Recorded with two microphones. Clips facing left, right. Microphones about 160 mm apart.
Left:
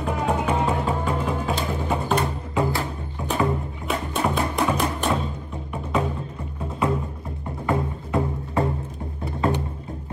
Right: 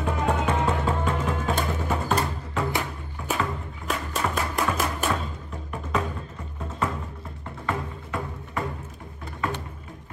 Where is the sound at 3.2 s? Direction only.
35° left (ahead or behind).